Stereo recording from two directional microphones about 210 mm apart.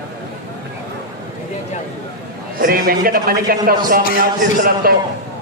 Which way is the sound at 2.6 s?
45° right (ahead or behind).